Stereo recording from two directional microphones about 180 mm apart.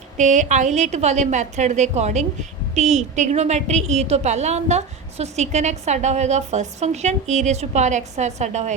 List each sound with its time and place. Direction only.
0.2 s a woman's voice: 40° right (ahead or behind)